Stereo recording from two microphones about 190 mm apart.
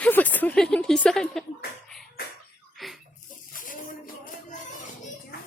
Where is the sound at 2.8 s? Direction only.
Centre (ahead or behind).